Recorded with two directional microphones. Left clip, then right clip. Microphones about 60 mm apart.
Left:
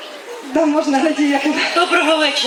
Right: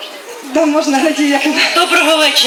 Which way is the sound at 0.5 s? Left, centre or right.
Right.